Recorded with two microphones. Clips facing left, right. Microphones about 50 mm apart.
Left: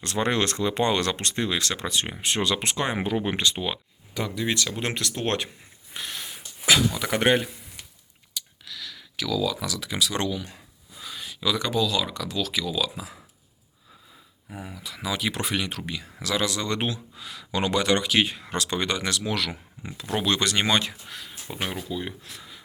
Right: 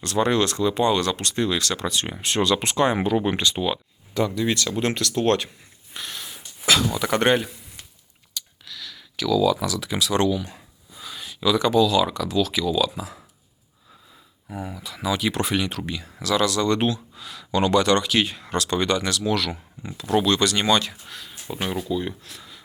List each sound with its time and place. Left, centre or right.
0.0 s speech: left
1.2 s speech: left
5.9 s a sound: centre
6.9 s speech: centre
14.5 s speech: centre
16.2 s speech: centre